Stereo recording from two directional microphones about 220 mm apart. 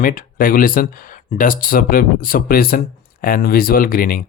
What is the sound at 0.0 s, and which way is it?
Speech, 40° left (ahead or behind).